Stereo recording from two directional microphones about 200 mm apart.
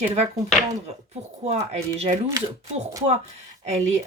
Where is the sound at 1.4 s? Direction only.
35° right (ahead or behind).